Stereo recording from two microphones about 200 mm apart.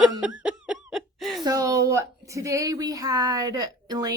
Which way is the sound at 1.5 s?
15° right (ahead or behind).